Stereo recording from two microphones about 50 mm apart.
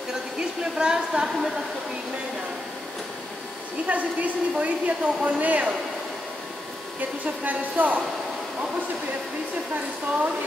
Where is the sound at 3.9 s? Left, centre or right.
Right.